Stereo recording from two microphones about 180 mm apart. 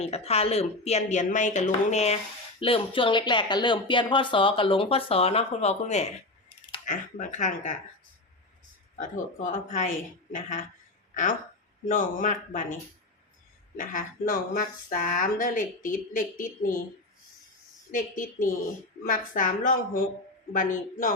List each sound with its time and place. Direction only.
0.0 s speech: 35° left (ahead or behind)
9.0 s speech: 45° left (ahead or behind)
17.9 s speech: 50° left (ahead or behind)